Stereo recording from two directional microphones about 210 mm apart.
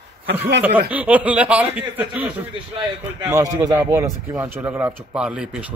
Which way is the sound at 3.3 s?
15° right (ahead or behind).